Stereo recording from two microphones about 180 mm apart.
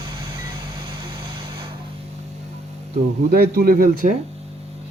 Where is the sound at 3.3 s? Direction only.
60° right (ahead or behind).